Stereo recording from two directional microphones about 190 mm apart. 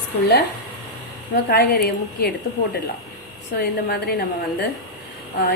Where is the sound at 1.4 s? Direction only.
55° left (ahead or behind).